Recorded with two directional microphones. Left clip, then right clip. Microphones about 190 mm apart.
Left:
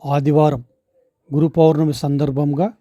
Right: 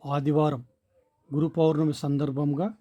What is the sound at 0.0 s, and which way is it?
A man's voice, 30° left (ahead or behind).